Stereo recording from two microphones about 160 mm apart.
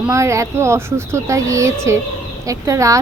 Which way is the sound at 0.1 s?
20° right (ahead or behind).